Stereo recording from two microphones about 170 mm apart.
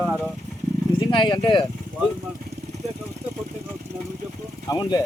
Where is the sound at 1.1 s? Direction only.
30° left (ahead or behind).